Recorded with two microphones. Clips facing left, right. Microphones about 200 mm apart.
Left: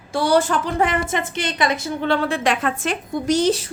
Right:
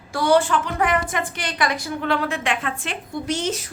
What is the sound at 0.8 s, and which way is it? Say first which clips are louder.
A woman's voice: left 1 dB; 25° left (ahead or behind).